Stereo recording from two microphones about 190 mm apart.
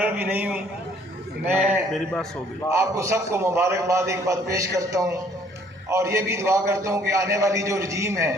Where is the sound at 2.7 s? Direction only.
15° right (ahead or behind).